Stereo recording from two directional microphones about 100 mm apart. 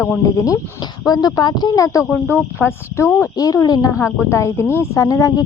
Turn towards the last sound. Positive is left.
turn(degrees=35)  # may be behind; listen again after turning